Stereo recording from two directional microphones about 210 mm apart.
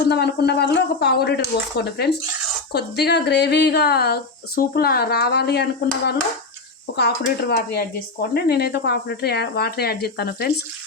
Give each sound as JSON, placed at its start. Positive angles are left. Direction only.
{"t": 0.1, "sound": "speech", "side_deg": 50}
{"t": 6.9, "sound": "speech", "side_deg": 50}